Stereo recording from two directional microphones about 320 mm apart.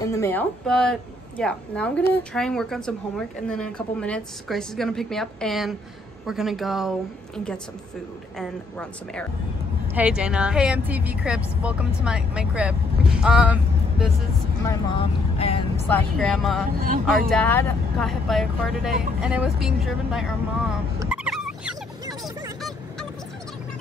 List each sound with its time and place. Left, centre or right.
0.0 s speech: centre
8.4 s speech: centre
14.7 s speech: centre
15.9 s speech: centre
21.1 s a sound: centre